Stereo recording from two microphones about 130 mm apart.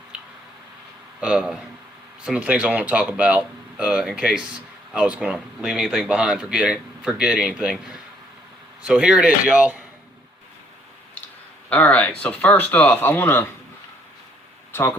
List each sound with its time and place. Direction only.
0.1 s a sound: 5° right (ahead or behind)
1.2 s speech: 5° right (ahead or behind)
11.7 s speech: 10° left (ahead or behind)
14.7 s speech: 15° left (ahead or behind)